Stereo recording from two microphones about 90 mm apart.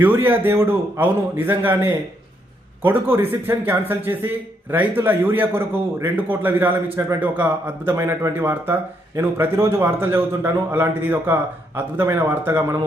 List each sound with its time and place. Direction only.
0.0 s speech: 20° right (ahead or behind)
7.0 s speech: 35° right (ahead or behind)